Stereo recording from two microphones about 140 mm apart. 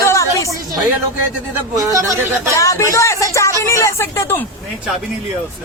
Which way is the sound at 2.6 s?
20° left (ahead or behind).